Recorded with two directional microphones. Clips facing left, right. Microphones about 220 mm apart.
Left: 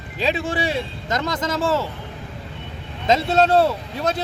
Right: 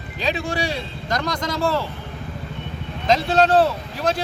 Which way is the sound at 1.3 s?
5° left (ahead or behind).